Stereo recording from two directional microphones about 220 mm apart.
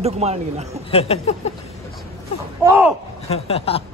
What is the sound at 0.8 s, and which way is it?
Speech, 25° left (ahead or behind).